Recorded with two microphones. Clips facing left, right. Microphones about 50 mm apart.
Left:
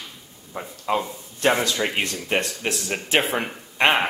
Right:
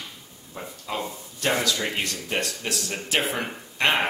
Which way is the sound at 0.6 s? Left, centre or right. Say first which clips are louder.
Left 6 dB; left.